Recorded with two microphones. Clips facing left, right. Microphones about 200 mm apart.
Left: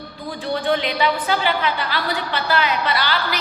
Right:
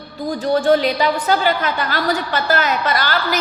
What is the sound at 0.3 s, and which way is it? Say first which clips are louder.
A woman's voice: right 7 dB; 40° right (ahead or behind).